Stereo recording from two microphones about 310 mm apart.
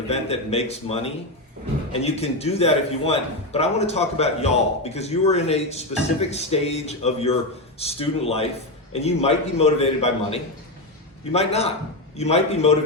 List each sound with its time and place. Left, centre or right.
0.1 s a man's voice: centre